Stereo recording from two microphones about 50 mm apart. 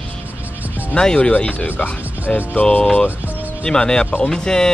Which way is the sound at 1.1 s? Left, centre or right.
Left.